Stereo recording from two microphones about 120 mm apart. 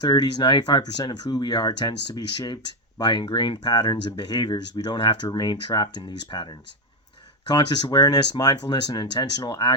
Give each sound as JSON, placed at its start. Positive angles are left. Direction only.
{"t": 0.1, "sound": "speech", "side_deg": 35}